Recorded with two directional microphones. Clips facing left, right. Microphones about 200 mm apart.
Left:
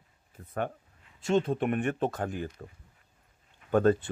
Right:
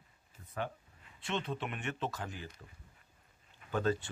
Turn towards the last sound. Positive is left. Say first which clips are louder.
# left 9 dB
turn(degrees=55)  # may be behind; listen again after turning